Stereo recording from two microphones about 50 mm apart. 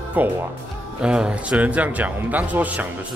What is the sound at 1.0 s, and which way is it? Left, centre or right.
Speech, centre.